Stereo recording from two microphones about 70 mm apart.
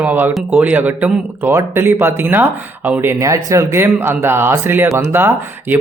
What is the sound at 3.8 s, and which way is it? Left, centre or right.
Speech, right.